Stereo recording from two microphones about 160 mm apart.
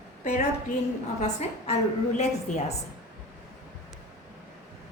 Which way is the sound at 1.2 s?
45° left (ahead or behind).